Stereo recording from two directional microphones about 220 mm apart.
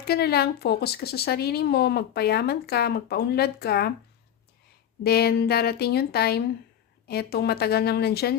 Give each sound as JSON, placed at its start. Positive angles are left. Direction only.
{"t": 0.0, "sound": "speech", "side_deg": 45}
{"t": 5.0, "sound": "speech", "side_deg": 45}